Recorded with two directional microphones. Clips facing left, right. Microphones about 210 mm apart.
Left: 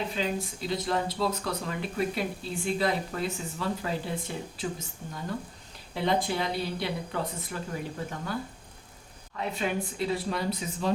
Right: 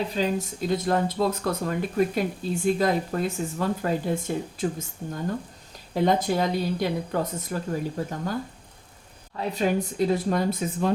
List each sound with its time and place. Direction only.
0.1 s speech: 40° right (ahead or behind)